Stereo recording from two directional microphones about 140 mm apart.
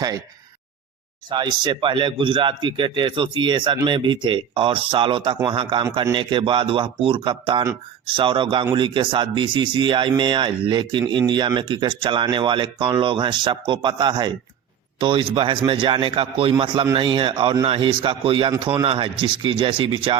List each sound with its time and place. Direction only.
1.3 s speech: 30° right (ahead or behind)